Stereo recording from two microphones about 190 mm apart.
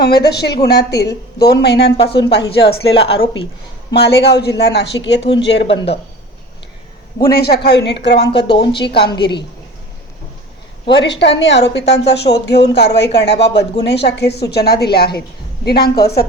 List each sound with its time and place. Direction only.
0.0 s a woman's voice: 60° left (ahead or behind)
2.6 s a woman's voice: 30° left (ahead or behind)
3.9 s a woman's voice: 60° left (ahead or behind)
7.2 s a woman's voice: 55° left (ahead or behind)
8.9 s a woman's voice: 25° left (ahead or behind)
10.8 s a woman's voice: 65° left (ahead or behind)